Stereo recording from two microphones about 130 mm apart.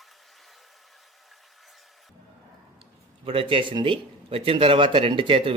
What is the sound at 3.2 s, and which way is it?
Speech, 40° right (ahead or behind).